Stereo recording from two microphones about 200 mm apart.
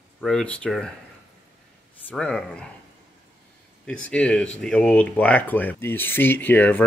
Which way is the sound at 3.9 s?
5° left (ahead or behind).